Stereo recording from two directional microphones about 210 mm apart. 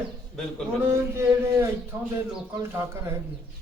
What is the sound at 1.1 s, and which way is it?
Speech, 10° right (ahead or behind).